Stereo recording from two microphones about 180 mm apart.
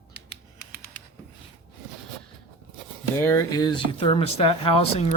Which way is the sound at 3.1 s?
15° left (ahead or behind).